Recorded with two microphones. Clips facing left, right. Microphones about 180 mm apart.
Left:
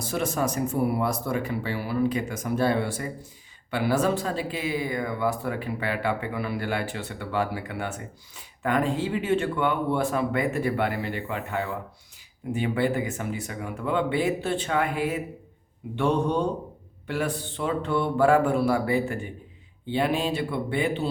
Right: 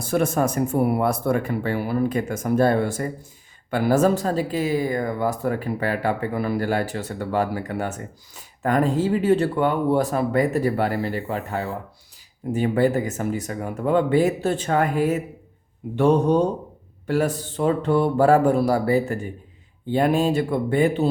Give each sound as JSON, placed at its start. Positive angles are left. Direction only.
{"t": 0.0, "sound": "speech", "side_deg": -50}